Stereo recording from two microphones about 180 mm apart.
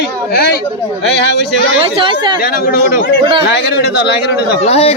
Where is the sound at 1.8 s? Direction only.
30° right (ahead or behind).